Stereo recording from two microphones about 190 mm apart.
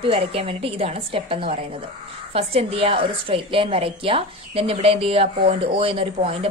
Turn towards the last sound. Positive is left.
turn(degrees=-30)  # may be behind; listen again after turning